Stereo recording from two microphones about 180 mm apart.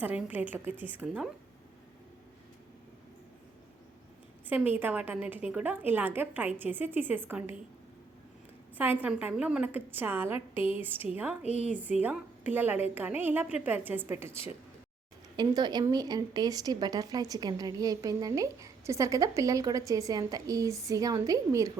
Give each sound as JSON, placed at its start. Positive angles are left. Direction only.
{"t": 0.0, "sound": "a woman's voice", "side_deg": -10}
{"t": 4.4, "sound": "a woman's voice", "side_deg": -10}
{"t": 8.8, "sound": "a woman's voice", "side_deg": -10}
{"t": 10.3, "sound": "a woman's voice", "side_deg": 30}
{"t": 10.7, "sound": "a woman's voice", "side_deg": -10}
{"t": 11.4, "sound": "a woman's voice", "side_deg": 40}
{"t": 11.7, "sound": "a woman's voice", "side_deg": -10}